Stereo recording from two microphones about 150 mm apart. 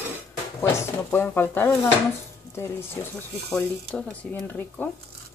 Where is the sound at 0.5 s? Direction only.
20° left (ahead or behind).